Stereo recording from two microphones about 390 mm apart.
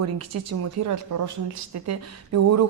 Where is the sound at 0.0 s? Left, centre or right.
Right.